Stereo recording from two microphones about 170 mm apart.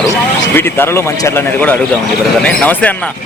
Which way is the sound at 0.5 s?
15° left (ahead or behind).